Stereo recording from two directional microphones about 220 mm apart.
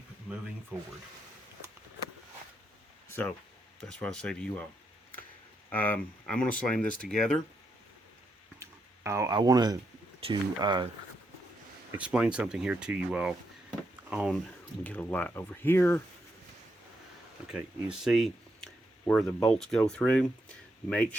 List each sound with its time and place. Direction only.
3.8 s speech: 5° left (ahead or behind)
5.7 s speech: 10° left (ahead or behind)
8.5 s a sound: 15° right (ahead or behind)
10.2 s speech: 20° right (ahead or behind)
11.9 s speech: 5° right (ahead or behind)
14.8 s speech: 10° left (ahead or behind)
17.5 s speech: centre (ahead or behind)